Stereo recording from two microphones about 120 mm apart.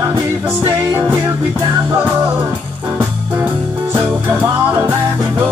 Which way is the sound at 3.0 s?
15° right (ahead or behind).